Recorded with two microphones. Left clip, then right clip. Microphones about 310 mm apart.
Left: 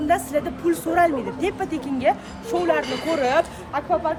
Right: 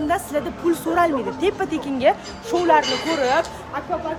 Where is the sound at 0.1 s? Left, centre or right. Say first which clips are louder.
Left 5 dB; centre.